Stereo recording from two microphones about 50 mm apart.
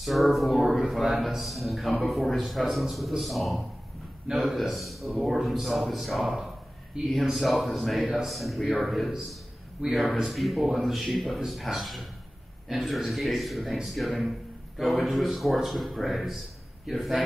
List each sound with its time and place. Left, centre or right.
0.0 s a man's voice: centre
9.8 s speech: right
10.2 s a man's voice: centre